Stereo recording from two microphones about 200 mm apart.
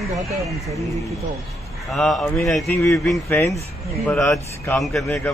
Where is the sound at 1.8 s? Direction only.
Centre (ahead or behind).